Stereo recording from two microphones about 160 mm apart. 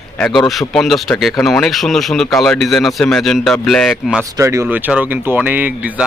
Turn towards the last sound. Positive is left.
turn(degrees=-10)  # may be behind; listen again after turning